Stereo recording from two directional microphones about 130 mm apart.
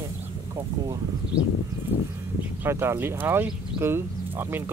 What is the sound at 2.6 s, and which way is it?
Speech, 20° right (ahead or behind).